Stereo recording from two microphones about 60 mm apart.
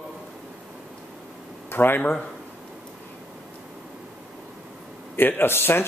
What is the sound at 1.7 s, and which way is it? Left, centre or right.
Speech, left.